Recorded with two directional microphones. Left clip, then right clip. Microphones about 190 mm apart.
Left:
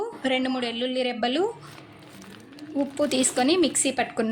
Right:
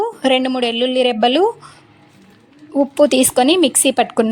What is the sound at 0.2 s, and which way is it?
Speech, 35° right (ahead or behind).